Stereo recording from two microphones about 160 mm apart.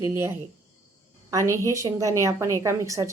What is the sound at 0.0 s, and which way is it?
A woman's voice, 15° right (ahead or behind).